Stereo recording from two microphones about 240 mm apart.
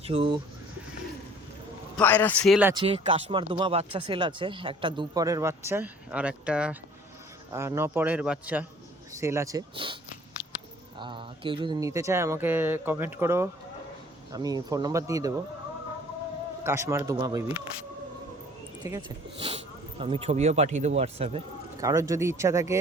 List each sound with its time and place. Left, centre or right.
0.0 s speech: right
2.0 s speech: centre
2.7 s speech: right
16.6 s speech: centre
18.8 s speech: centre
21.8 s speech: centre